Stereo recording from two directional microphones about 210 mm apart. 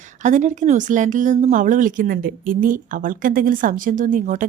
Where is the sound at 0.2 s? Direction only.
35° right (ahead or behind).